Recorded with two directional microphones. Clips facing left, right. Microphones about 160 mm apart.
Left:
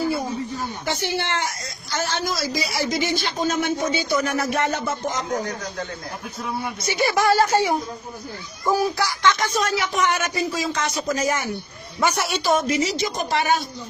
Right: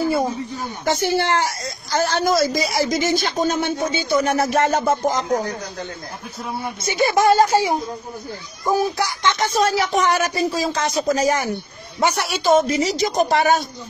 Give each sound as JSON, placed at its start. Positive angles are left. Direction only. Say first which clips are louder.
{"t": 0.8, "sound": "speech", "louder": "right 8 dB", "side_deg": -45}
{"t": 3.6, "sound": "speech", "louder": "right 1 dB", "side_deg": -25}
{"t": 6.8, "sound": "speech", "louder": "right 4 dB", "side_deg": -25}
{"t": 8.7, "sound": "speech", "louder": "right 2 dB", "side_deg": -25}